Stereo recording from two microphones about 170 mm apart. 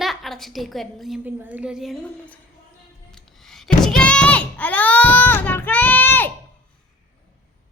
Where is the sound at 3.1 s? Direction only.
Centre (ahead or behind).